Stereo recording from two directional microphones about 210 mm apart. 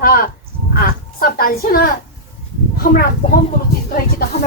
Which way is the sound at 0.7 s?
45° left (ahead or behind).